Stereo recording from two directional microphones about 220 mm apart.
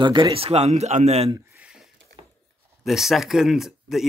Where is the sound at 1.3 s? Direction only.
15° right (ahead or behind).